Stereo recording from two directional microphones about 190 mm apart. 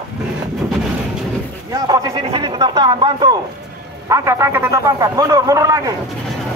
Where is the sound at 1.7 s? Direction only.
20° right (ahead or behind).